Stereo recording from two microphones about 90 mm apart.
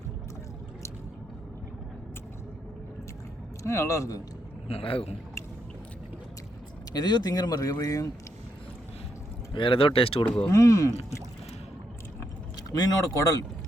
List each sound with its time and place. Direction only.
3.6 s speech: 35° left (ahead or behind)
4.7 s speech: 90° left
6.9 s speech: 50° left (ahead or behind)
9.5 s speech: 80° left
10.5 s speech: 35° left (ahead or behind)
12.7 s speech: 45° left (ahead or behind)